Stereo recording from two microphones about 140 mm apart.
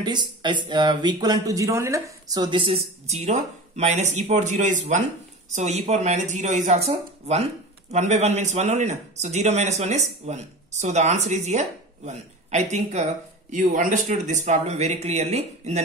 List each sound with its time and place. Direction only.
0.0 s a man's voice: 30° right (ahead or behind); by 15.8 s 50° right (ahead or behind)